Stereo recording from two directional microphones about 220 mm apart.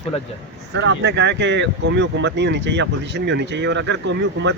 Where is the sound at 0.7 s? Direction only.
55° right (ahead or behind).